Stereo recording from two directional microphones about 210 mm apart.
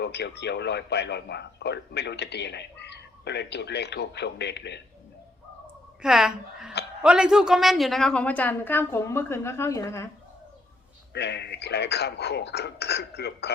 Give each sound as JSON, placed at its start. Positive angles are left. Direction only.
{"t": 0.0, "sound": "speech", "side_deg": 55}
{"t": 6.0, "sound": "a woman's voice", "side_deg": -5}
{"t": 11.1, "sound": "speech", "side_deg": 55}